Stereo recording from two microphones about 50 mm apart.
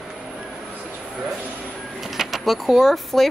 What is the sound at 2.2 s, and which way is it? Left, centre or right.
Speech, centre.